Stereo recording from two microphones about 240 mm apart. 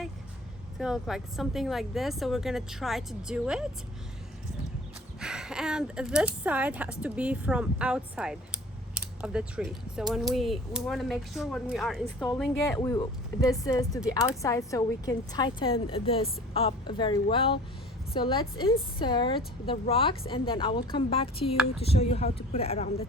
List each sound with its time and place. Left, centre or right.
0.8 s speech: centre
5.2 s speech: centre
12.6 s a woman's voice: centre